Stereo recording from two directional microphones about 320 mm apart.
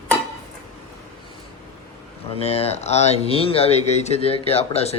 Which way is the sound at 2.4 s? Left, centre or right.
Centre.